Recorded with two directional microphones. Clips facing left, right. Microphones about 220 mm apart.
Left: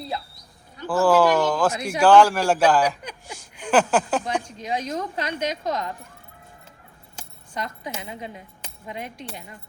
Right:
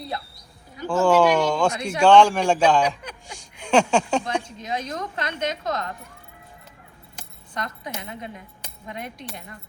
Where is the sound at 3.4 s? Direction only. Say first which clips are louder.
Right 1 dB; 5° left (ahead or behind).